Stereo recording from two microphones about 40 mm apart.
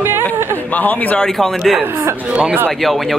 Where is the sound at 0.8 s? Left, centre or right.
Left.